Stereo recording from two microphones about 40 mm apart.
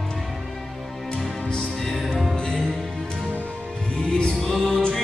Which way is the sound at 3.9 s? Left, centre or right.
Left.